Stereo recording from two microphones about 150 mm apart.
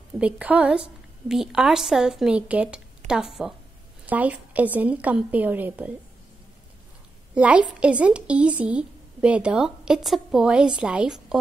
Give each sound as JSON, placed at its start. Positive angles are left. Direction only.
{"t": 0.2, "sound": "a woman's voice", "side_deg": -10}
{"t": 7.3, "sound": "a woman's voice", "side_deg": -10}